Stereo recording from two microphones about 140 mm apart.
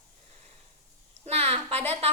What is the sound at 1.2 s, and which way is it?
Speech, 45° right (ahead or behind).